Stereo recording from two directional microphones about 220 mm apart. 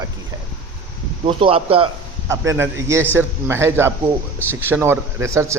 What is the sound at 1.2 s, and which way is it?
Speech, 25° right (ahead or behind).